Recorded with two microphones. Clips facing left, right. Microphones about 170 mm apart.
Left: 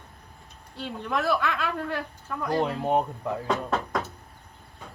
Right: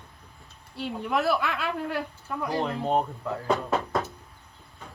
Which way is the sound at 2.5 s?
15° left (ahead or behind).